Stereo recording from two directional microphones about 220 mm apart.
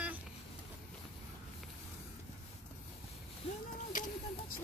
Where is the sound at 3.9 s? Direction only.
35° left (ahead or behind).